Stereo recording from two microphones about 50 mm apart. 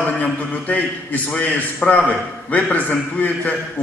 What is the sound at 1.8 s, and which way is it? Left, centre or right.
Speech, centre.